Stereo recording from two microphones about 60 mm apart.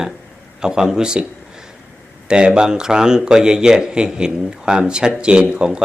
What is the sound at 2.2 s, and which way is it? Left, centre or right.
Speech, centre.